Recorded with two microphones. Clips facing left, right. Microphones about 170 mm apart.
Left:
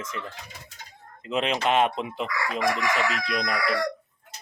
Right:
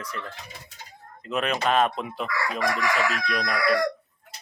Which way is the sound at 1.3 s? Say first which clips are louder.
Even; 25° left (ahead or behind).